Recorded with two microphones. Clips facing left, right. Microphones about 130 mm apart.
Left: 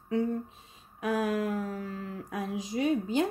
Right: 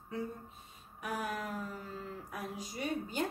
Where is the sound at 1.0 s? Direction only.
90° left.